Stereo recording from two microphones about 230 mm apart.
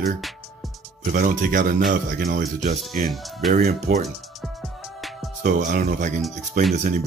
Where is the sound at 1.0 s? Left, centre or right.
Right.